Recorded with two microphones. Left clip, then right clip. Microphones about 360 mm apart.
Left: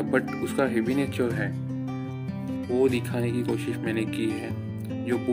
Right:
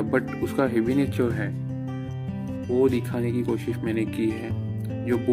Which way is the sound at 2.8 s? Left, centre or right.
Centre.